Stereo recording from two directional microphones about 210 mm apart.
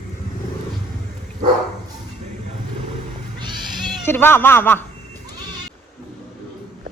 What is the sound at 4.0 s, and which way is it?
Speech, 10° left (ahead or behind).